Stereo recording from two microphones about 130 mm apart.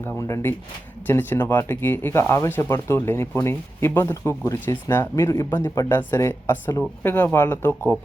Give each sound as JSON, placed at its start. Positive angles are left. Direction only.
{"t": 0.0, "sound": "speech", "side_deg": 20}